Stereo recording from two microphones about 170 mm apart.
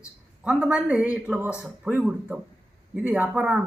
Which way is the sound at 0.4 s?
5° right (ahead or behind).